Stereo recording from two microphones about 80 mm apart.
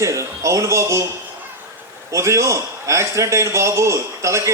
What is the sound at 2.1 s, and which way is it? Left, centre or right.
A man's voice, right.